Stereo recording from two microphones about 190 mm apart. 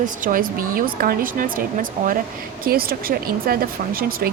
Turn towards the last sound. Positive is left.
turn(degrees=-50)  # may be behind; listen again after turning